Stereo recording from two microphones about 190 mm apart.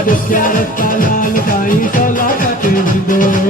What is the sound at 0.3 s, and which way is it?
Music, 45° left (ahead or behind).